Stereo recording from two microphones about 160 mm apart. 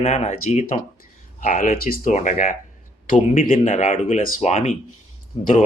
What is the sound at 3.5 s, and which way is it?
Speech, 45° left (ahead or behind).